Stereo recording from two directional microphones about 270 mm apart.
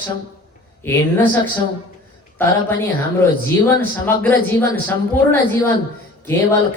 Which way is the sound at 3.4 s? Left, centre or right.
Centre.